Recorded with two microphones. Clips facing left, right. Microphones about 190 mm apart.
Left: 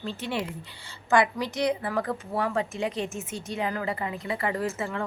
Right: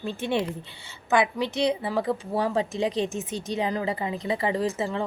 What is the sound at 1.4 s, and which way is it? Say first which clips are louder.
Speech: right 2 dB; 25° right (ahead or behind).